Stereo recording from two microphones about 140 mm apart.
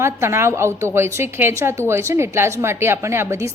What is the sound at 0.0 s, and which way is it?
A woman's voice, 20° right (ahead or behind).